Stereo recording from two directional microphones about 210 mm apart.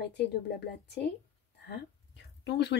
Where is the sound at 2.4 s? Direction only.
55° left (ahead or behind).